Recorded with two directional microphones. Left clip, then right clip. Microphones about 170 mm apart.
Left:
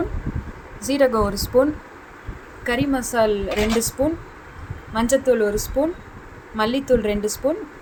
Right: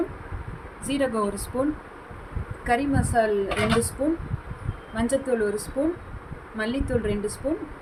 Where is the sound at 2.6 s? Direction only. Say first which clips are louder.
Left 2 dB; 50° left (ahead or behind).